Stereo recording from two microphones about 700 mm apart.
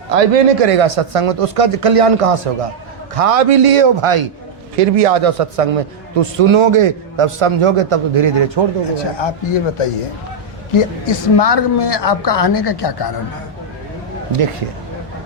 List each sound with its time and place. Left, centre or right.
0.1 s a man's voice: right
4.8 s a man's voice: right
9.1 s a woman's voice: left